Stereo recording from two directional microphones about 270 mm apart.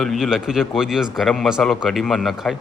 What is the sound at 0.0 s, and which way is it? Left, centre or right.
A man's voice, centre.